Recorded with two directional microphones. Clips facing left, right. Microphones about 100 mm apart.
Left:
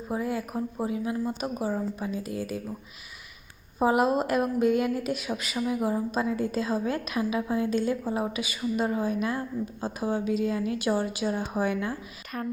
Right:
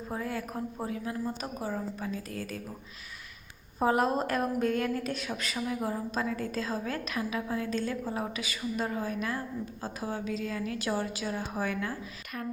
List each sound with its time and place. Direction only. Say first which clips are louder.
0.1 s a woman's voice: left 5 dB; 10° left (ahead or behind)
3.8 s a woman's voice: left 3 dB; 10° left (ahead or behind)